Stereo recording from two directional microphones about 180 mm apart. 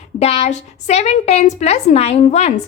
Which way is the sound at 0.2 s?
35° left (ahead or behind).